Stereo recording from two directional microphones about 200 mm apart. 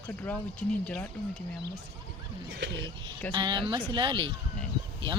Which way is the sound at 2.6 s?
60° right (ahead or behind).